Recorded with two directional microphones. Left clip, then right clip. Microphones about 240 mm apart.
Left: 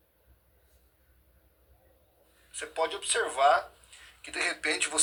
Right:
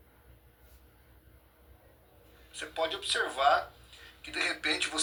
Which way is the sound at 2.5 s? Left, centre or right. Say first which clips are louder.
Left 2 dB; centre.